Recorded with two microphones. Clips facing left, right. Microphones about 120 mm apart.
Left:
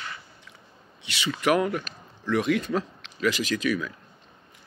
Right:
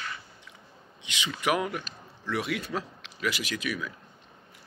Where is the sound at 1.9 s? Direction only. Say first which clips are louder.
Left 2 dB; 55° left (ahead or behind).